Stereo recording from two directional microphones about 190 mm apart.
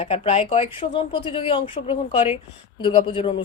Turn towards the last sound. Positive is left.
turn(degrees=30)  # may be behind; listen again after turning